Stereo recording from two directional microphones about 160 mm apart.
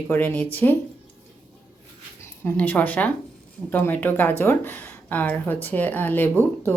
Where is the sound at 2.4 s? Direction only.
10° left (ahead or behind).